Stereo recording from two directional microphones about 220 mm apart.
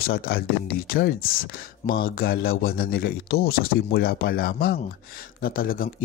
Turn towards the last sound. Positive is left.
turn(degrees=40)  # may be behind; listen again after turning